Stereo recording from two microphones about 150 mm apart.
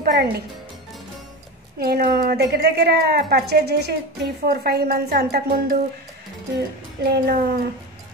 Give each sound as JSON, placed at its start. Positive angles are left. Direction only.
{"t": 0.0, "sound": "speech", "side_deg": -90}
{"t": 1.8, "sound": "a woman's voice", "side_deg": -90}
{"t": 7.0, "sound": "a woman's voice", "side_deg": -90}